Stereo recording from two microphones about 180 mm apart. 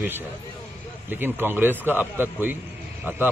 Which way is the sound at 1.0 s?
10° right (ahead or behind).